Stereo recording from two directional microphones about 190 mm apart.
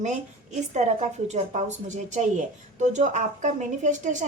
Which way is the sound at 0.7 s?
35° right (ahead or behind).